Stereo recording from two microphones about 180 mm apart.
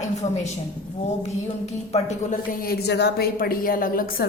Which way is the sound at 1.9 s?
40° left (ahead or behind).